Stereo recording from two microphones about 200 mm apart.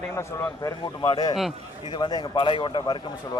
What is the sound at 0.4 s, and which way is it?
A man's voice, 25° left (ahead or behind).